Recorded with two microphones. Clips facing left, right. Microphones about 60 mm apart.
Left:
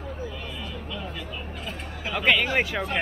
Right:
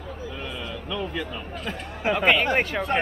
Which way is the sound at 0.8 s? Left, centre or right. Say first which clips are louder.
Right 6 dB; right.